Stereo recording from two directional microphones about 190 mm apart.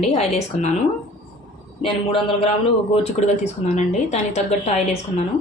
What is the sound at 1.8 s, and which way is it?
Speech, 30° left (ahead or behind).